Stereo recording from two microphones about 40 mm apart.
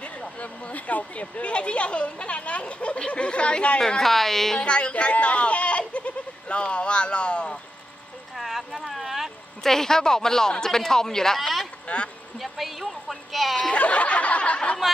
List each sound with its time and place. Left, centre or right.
0.4 s speech: left
4.0 s speech: centre
4.6 s speech: left
5.1 s bleat: left
8.4 s speech: centre
9.6 s speech: centre
11.9 s speech: left
12.4 s speech: centre
13.7 s speech: left